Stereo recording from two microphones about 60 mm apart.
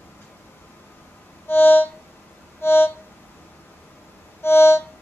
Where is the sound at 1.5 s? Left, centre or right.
Left.